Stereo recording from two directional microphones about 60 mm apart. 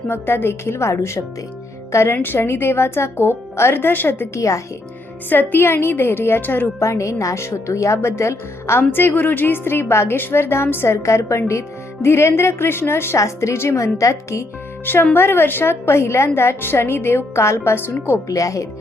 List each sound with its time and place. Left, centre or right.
0.1 s a woman's voice: left
2.2 s a woman's voice: left
4.4 s speech: left
5.3 s a woman's voice: left
6.7 s speech: left
8.8 s a woman's voice: left
11.0 s a woman's voice: left
13.1 s speech: left
15.1 s a woman's voice: left
18.3 s speech: left